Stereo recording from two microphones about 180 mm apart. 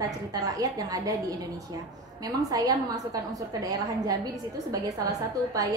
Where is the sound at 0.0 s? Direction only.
20° right (ahead or behind).